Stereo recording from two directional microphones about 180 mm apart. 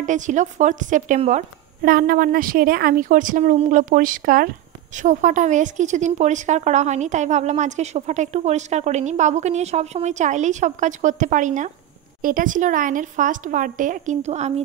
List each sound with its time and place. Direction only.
0.0 s a woman's voice: 45° right (ahead or behind)
1.8 s a woman's voice: 55° right (ahead or behind); by 14.5 s 40° right (ahead or behind)